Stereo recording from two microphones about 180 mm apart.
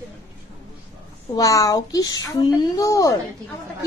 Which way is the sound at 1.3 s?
20° left (ahead or behind).